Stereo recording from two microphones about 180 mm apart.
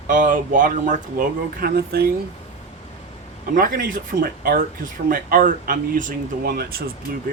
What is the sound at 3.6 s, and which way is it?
Speech, 50° right (ahead or behind).